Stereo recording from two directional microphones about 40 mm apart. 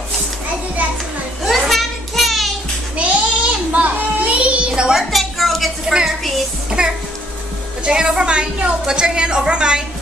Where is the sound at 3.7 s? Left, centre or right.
Right.